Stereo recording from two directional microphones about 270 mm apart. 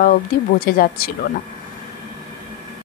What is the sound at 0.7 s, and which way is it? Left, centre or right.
Speech, left.